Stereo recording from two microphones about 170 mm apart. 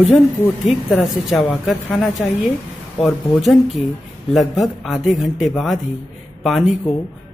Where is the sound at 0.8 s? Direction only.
5° left (ahead or behind).